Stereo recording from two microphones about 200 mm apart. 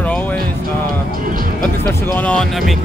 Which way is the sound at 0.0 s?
5° left (ahead or behind).